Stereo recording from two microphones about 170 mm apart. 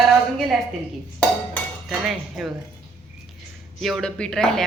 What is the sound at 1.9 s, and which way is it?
Speech, centre (ahead or behind).